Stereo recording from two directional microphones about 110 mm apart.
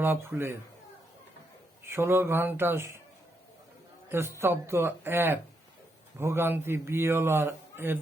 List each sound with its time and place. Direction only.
0.0 s speech: 20° right (ahead or behind)
1.8 s speech: 20° right (ahead or behind)
4.1 s speech: 20° right (ahead or behind)